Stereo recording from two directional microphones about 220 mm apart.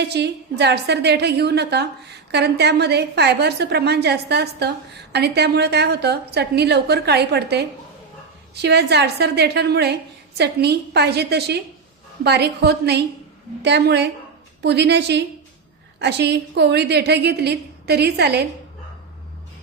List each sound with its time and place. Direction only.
0.0 s a woman's voice: 50° right (ahead or behind)